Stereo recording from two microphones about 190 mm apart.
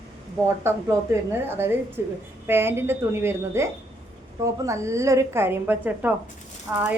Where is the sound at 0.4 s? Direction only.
15° right (ahead or behind).